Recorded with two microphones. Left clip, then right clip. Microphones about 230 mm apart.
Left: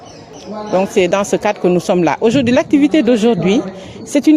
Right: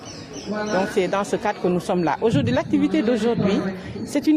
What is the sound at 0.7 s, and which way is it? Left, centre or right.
Speech, left.